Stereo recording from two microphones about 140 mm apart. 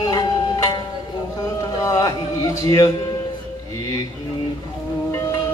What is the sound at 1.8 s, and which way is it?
Music, 25° left (ahead or behind).